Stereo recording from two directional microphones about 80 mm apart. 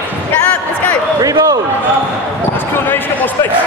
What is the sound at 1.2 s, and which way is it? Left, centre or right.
Speech, right.